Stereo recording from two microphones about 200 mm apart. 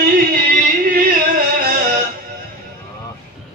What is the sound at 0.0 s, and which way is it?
Music, 45° right (ahead or behind).